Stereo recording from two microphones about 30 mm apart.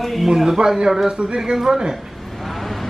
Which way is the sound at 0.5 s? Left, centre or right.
Centre.